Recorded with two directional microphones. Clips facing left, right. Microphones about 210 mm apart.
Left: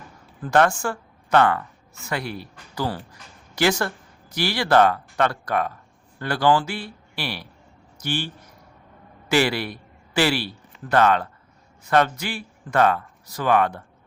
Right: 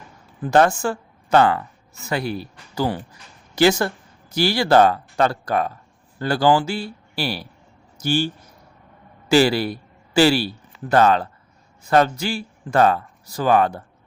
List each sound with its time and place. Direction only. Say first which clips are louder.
0.4 s speech: right 3 dB; 25° right (ahead or behind)
9.3 s a man's voice: right 5 dB; 30° right (ahead or behind)